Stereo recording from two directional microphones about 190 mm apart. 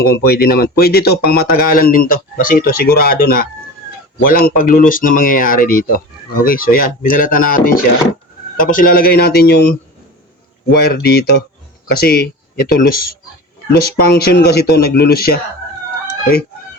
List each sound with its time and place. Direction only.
0.0 s speech: 55° left (ahead or behind)
13.7 s speech: 55° left (ahead or behind)